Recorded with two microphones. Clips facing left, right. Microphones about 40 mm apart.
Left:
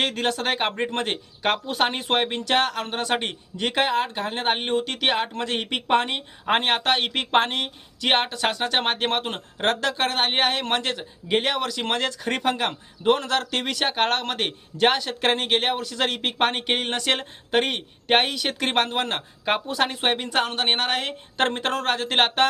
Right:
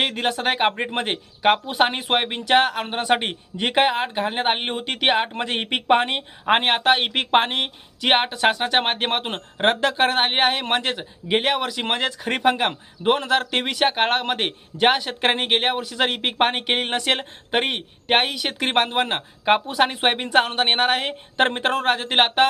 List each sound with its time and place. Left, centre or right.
0.0 s speech: centre